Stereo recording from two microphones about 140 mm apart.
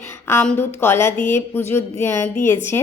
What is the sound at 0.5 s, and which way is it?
A woman's voice, 15° left (ahead or behind).